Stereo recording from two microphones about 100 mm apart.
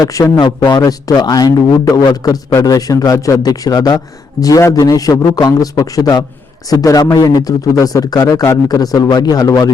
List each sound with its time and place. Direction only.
0.0 s a man's voice: 35° left (ahead or behind)